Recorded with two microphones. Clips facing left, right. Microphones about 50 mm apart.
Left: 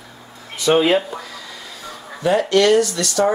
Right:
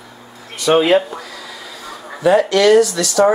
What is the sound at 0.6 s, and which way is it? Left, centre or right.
Speech, centre.